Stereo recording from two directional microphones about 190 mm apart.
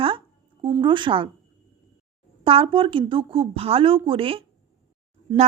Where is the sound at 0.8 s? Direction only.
25° right (ahead or behind).